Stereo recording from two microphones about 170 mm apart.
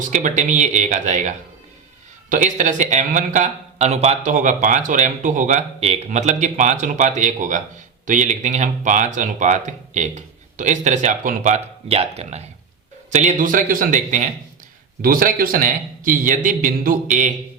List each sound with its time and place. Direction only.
0.0 s speech: 50° right (ahead or behind)